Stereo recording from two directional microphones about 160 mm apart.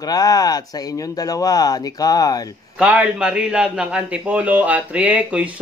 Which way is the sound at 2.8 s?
10° right (ahead or behind).